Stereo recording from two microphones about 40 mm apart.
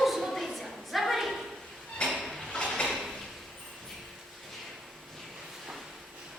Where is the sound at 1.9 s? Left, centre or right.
Centre.